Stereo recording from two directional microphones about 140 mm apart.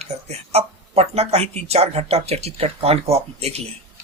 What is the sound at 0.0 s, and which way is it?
Speech, 50° right (ahead or behind).